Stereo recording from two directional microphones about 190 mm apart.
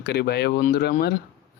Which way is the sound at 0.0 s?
60° left (ahead or behind).